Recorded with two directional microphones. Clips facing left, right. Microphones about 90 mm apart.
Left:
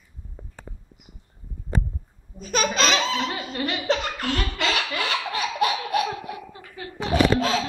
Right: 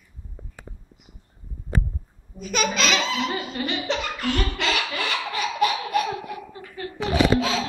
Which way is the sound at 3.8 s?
40° left (ahead or behind).